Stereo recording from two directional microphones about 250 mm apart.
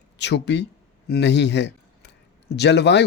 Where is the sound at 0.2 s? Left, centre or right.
Left.